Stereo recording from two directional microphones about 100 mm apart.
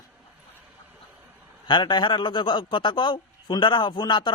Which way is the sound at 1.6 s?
50° left (ahead or behind).